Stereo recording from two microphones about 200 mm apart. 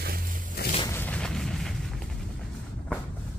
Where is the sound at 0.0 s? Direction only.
45° right (ahead or behind).